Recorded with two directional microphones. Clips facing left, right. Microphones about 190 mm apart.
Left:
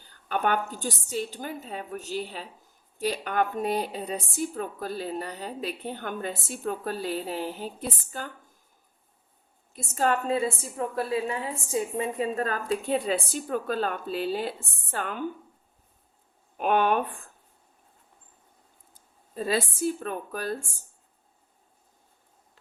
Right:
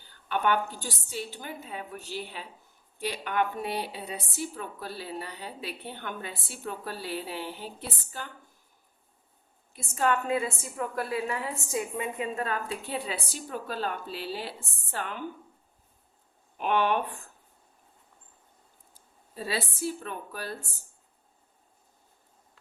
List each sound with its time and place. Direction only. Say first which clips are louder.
0.3 s a woman's voice: even; 40° left (ahead or behind)
9.7 s a woman's voice: left 1 dB; 40° left (ahead or behind)
16.6 s a woman's voice: left 3 dB; 45° left (ahead or behind)
19.3 s a woman's voice: left 6 dB; 45° left (ahead or behind)